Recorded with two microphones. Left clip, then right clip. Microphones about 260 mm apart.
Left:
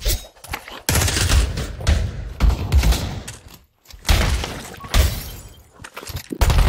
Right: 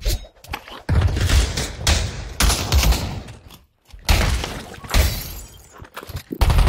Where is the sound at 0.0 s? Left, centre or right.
Centre.